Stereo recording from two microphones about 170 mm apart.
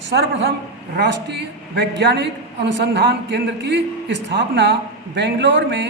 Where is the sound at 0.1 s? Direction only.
90° right.